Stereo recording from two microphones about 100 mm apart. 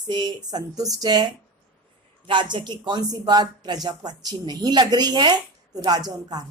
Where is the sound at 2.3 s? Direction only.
50° right (ahead or behind).